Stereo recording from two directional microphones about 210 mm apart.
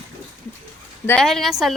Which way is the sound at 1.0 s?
5° left (ahead or behind).